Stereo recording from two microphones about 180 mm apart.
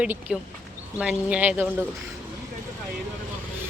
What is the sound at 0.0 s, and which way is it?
Speech, 10° right (ahead or behind).